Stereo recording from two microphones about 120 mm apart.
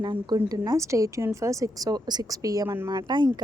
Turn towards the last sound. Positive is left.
turn(degrees=-35)  # may be behind; listen again after turning